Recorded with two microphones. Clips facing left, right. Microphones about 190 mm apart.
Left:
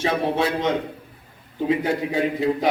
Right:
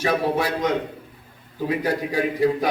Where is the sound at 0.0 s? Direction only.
25° left (ahead or behind).